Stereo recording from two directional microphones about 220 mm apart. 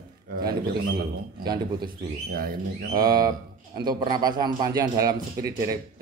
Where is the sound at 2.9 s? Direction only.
20° right (ahead or behind).